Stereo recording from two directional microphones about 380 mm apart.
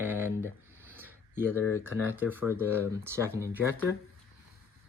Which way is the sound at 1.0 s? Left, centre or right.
Centre.